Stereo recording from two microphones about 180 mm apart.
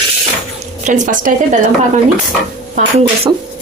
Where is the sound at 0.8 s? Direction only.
45° right (ahead or behind).